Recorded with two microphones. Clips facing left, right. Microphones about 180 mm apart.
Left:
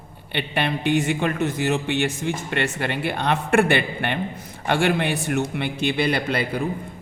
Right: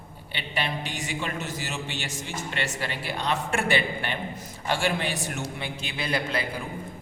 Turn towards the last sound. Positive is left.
turn(degrees=65)  # may be behind; listen again after turning